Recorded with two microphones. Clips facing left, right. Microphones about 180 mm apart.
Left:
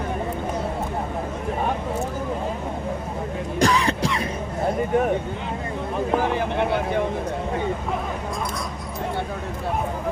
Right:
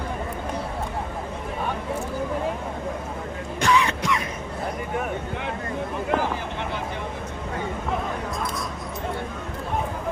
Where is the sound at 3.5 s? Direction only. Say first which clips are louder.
Left 1 dB; 35° left (ahead or behind).